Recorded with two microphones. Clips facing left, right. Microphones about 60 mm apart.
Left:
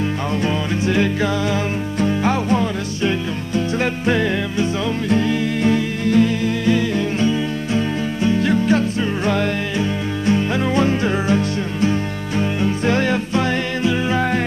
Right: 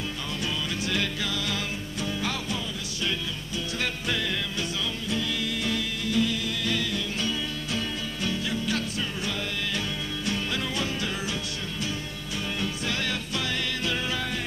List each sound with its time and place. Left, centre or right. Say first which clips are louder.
0.4 s music: left 8 dB; left
2.0 s music: left 13 dB; left
6.6 s music: left 11 dB; left
8.6 s music: left 12 dB; left